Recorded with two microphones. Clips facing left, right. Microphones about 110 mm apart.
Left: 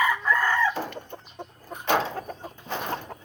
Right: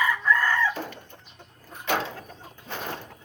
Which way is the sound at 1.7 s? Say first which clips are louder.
Left 3 dB; 40° left (ahead or behind).